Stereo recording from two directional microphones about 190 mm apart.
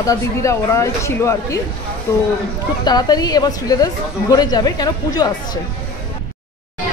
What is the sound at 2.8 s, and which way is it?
A woman's voice, 20° left (ahead or behind).